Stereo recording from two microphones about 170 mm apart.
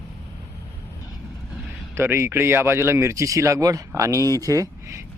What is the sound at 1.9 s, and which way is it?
Speech, 15° right (ahead or behind).